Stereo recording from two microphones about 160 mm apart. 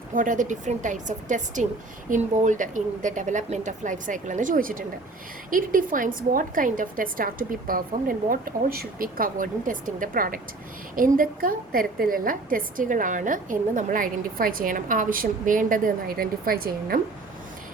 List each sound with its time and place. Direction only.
0.1 s a woman's voice: 55° right (ahead or behind)